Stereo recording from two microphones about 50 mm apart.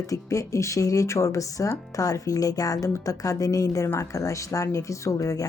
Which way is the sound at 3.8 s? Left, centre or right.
Left.